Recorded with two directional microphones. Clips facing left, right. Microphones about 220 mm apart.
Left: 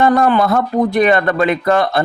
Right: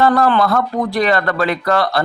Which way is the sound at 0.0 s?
20° left (ahead or behind).